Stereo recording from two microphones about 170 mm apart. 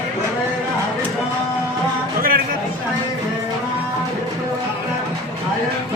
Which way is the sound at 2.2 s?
60° right (ahead or behind).